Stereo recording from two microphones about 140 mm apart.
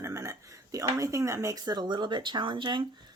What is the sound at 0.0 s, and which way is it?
A woman's voice, 20° right (ahead or behind).